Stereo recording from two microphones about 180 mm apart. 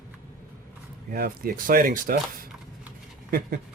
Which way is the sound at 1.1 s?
55° right (ahead or behind).